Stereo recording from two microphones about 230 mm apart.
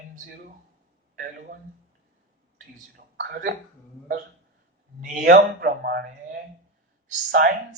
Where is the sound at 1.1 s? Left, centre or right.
Right.